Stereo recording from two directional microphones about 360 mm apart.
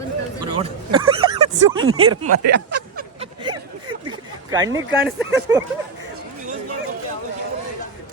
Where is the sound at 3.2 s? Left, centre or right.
Centre.